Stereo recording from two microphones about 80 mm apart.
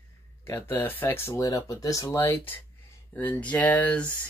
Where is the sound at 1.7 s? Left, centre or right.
Left.